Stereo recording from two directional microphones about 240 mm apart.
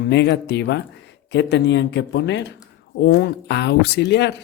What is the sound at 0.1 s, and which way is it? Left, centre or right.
Speech, left.